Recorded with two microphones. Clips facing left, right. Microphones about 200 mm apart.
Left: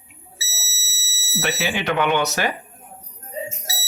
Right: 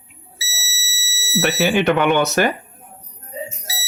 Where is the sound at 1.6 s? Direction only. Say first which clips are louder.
Right 11 dB; 50° right (ahead or behind).